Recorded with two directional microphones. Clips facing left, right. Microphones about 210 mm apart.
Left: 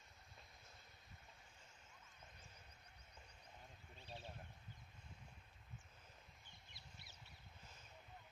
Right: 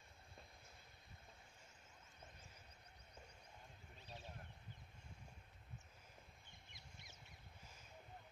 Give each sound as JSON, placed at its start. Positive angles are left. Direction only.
{"t": 4.0, "sound": "horse", "side_deg": 30}
{"t": 6.7, "sound": "duck", "side_deg": 35}